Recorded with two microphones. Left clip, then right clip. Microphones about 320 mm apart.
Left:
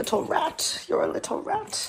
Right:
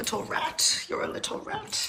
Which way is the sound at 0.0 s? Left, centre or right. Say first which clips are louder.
Left 5 dB; centre.